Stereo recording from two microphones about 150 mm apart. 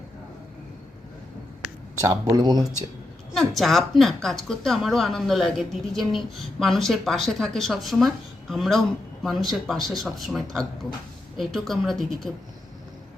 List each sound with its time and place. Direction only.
2.0 s speech: 20° right (ahead or behind)
3.3 s a woman's voice: centre (ahead or behind)